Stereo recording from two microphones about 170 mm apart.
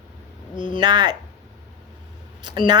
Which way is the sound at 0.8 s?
25° right (ahead or behind).